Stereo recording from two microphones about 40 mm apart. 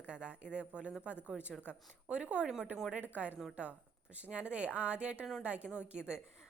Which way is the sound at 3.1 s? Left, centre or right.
Right.